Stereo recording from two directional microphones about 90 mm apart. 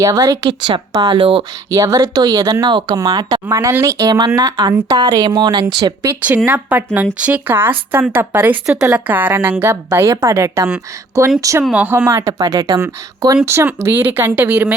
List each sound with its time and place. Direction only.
0.0 s a woman's voice: 40° right (ahead or behind)
1.0 s speech: 70° right (ahead or behind)
1.7 s a woman's voice: 40° right (ahead or behind)
2.6 s speech: 55° right (ahead or behind)
3.5 s a woman's voice: 35° right (ahead or behind); by 5.6 s 50° right (ahead or behind)
5.8 s a woman's voice: 40° right (ahead or behind)
6.2 s a woman's voice: 20° right (ahead or behind); by 11.6 s 40° right (ahead or behind)
11.7 s a woman's voice: 20° right (ahead or behind)
12.4 s speech: 45° right (ahead or behind)
13.4 s a woman's voice: 30° right (ahead or behind)